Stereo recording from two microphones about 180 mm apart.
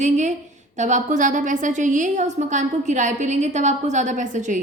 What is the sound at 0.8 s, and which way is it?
A woman's voice, 40° right (ahead or behind).